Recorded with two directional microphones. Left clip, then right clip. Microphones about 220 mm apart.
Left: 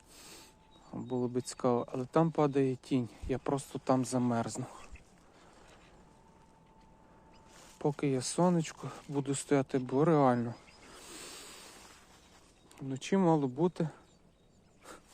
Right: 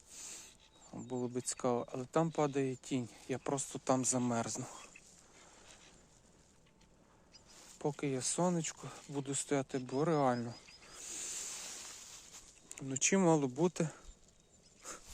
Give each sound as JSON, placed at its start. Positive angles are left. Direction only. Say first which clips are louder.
{"t": 0.1, "sound": "a sound", "louder": "right 2 dB", "side_deg": 0}
{"t": 0.9, "sound": "speech", "louder": "left 5 dB", "side_deg": 0}
{"t": 7.8, "sound": "speech", "louder": "left 5 dB", "side_deg": 0}
{"t": 12.6, "sound": "speech", "louder": "right 4 dB", "side_deg": -15}